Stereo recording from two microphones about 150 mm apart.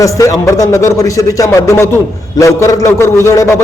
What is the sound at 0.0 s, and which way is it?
A man's voice, 20° left (ahead or behind).